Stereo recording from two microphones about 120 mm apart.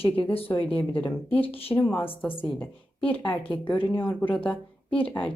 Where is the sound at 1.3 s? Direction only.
50° left (ahead or behind).